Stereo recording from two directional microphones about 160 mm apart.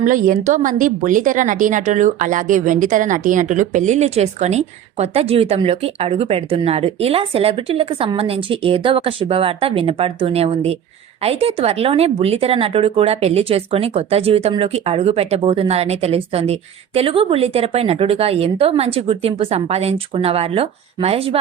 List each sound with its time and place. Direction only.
0.0 s a woman's voice: 55° right (ahead or behind); by 21.3 s 40° right (ahead or behind)